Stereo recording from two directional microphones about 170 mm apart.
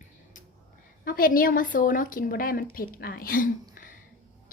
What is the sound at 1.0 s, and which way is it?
A woman's voice, 55° left (ahead or behind).